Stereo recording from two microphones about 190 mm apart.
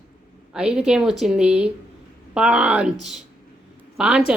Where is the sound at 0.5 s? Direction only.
5° right (ahead or behind).